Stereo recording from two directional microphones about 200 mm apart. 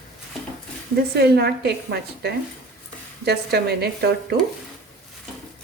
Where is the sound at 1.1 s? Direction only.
55° right (ahead or behind).